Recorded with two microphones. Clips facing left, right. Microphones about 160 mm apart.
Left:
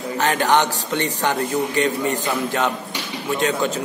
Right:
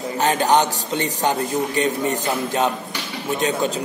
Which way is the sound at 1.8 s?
20° right (ahead or behind).